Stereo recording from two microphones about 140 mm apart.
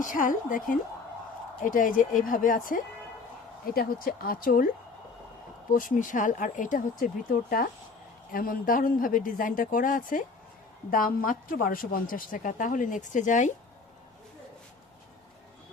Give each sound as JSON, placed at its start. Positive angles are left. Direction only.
{"t": 0.0, "sound": "a woman's voice", "side_deg": 70}
{"t": 3.8, "sound": "a woman's voice", "side_deg": 90}
{"t": 5.7, "sound": "a woman's voice", "side_deg": 75}
{"t": 8.3, "sound": "speech", "side_deg": 90}
{"t": 10.9, "sound": "a woman's voice", "side_deg": 90}